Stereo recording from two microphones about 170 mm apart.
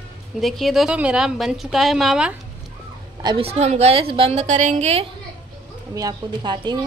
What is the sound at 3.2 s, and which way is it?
A woman's voice, 35° right (ahead or behind).